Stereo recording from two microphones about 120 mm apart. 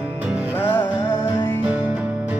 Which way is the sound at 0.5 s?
15° left (ahead or behind).